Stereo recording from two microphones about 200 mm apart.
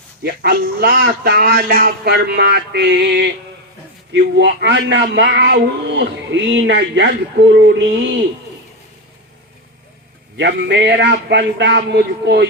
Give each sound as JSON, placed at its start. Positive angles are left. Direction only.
{"t": 0.2, "sound": "a man's voice", "side_deg": -50}
{"t": 10.3, "sound": "speech", "side_deg": -60}